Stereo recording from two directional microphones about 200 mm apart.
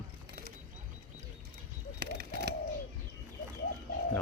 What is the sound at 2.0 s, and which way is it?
Bird, 55° right (ahead or behind).